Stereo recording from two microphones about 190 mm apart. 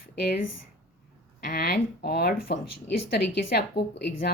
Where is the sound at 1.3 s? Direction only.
55° left (ahead or behind).